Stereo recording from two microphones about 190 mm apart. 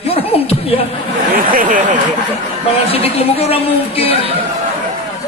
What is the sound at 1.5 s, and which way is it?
Speech, 45° right (ahead or behind).